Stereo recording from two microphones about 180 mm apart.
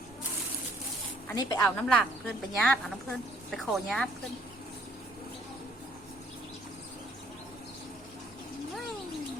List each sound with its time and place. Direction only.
1.3 s speech: 20° left (ahead or behind)
1.5 s speech: 5° left (ahead or behind)